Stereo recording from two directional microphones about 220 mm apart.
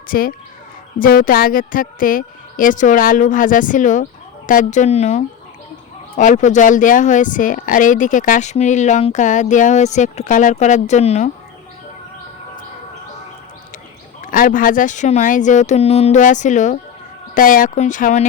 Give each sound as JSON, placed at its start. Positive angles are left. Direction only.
{"t": 0.1, "sound": "speech", "side_deg": 40}
{"t": 14.2, "sound": "speech", "side_deg": 40}